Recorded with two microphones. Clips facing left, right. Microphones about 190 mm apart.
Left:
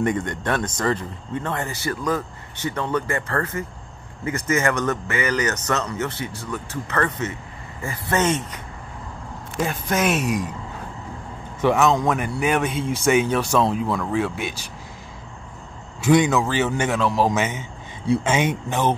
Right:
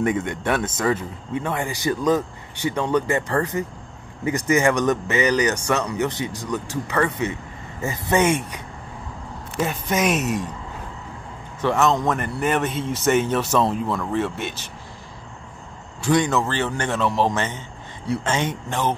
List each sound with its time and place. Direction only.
0.0 s speech: 5° right (ahead or behind)
9.6 s a man's voice: centre (ahead or behind)
11.6 s a man's voice: centre (ahead or behind)
16.1 s a man's voice: 5° left (ahead or behind)